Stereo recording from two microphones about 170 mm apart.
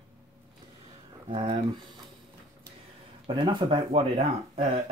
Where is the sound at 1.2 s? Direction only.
30° right (ahead or behind).